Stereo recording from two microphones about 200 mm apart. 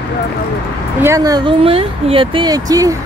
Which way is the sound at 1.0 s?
15° right (ahead or behind).